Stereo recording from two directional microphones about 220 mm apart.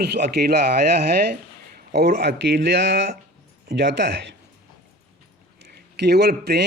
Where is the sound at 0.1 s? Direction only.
45° right (ahead or behind).